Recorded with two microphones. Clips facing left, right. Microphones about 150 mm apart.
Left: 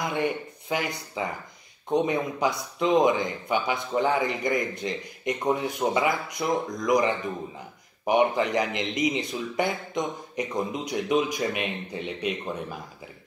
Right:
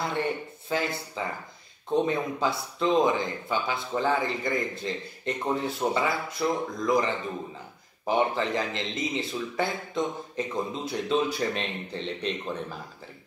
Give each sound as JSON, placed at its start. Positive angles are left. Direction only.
{"t": 0.0, "sound": "speech", "side_deg": 15}